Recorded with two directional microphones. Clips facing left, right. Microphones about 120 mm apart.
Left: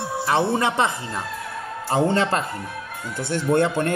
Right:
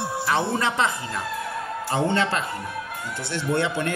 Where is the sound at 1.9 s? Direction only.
40° left (ahead or behind).